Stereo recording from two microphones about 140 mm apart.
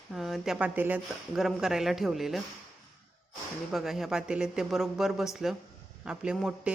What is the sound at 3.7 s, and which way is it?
Speech, centre (ahead or behind).